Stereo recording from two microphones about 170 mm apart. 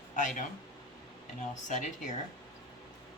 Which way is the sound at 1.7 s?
45° left (ahead or behind).